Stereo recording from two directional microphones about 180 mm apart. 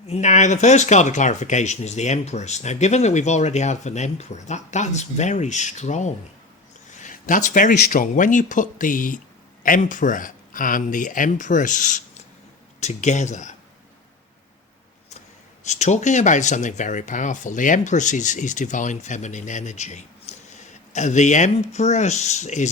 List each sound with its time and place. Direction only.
0.1 s speech: 40° left (ahead or behind)
15.6 s speech: 40° left (ahead or behind)